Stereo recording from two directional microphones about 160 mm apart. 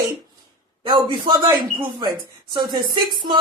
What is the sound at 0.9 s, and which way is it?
Speech, 30° right (ahead or behind).